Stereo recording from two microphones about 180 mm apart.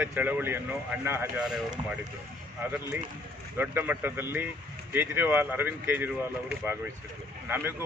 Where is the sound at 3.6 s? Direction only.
10° right (ahead or behind).